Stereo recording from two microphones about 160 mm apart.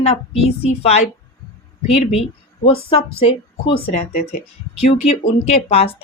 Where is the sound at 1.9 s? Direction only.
40° left (ahead or behind).